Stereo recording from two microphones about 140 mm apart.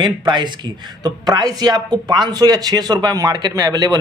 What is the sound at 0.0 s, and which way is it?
Speech, 30° right (ahead or behind).